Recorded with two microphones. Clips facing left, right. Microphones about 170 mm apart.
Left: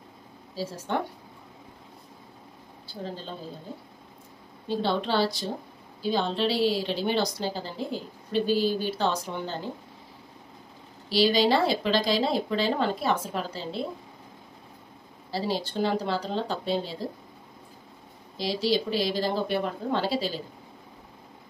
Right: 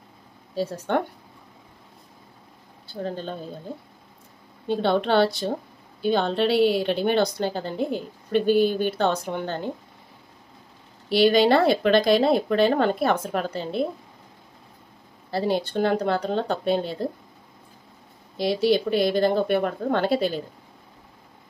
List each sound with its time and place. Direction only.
0.6 s a woman's voice: 60° right (ahead or behind)
2.9 s a woman's voice: 55° right (ahead or behind)
4.6 s a woman's voice: 60° right (ahead or behind)
11.1 s a woman's voice: 60° right (ahead or behind)
15.3 s a woman's voice: 55° right (ahead or behind)
18.4 s a woman's voice: 55° right (ahead or behind)